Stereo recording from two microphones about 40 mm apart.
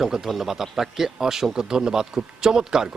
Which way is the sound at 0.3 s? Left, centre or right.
Centre.